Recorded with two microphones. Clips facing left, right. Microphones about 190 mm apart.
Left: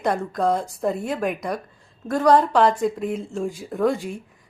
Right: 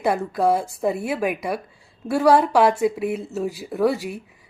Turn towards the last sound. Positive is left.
turn(degrees=-5)  # may be behind; listen again after turning